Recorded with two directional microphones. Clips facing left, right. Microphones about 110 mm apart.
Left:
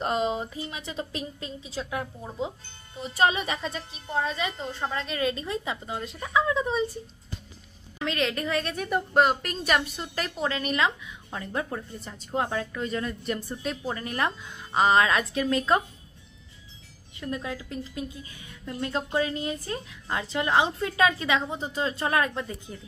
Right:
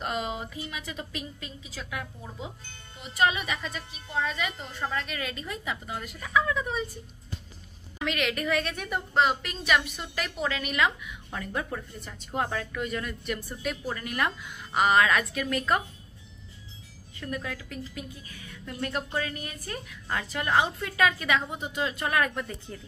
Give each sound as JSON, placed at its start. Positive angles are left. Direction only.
{"t": 0.0, "sound": "a woman's voice", "side_deg": 30}
{"t": 8.0, "sound": "a woman's voice", "side_deg": 30}
{"t": 9.1, "sound": "a woman's voice", "side_deg": 45}
{"t": 17.2, "sound": "a woman's voice", "side_deg": 25}